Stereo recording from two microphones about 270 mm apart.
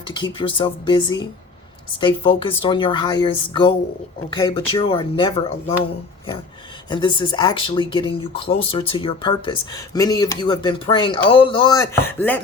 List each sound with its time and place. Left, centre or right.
0.1 s speech: centre
6.9 s speech: centre